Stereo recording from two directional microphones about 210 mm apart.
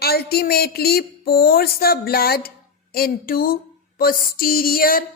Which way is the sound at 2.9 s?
45° left (ahead or behind).